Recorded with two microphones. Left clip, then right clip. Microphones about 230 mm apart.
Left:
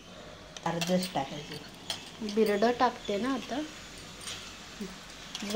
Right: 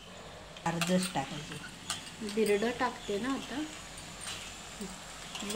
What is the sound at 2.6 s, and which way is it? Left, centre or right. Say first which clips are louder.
Speech: left 6 dB; centre.